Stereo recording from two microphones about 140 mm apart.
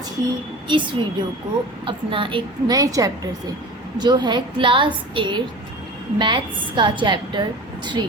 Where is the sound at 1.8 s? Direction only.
35° right (ahead or behind).